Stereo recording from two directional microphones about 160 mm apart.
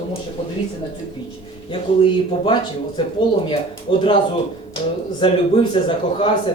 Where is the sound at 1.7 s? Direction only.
30° left (ahead or behind).